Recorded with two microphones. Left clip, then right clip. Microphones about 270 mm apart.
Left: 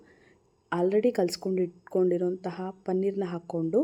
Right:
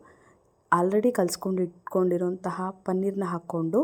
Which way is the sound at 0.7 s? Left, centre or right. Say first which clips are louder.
Right 3 dB; right.